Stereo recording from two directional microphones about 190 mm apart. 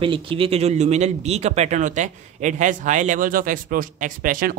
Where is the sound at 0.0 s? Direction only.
25° right (ahead or behind).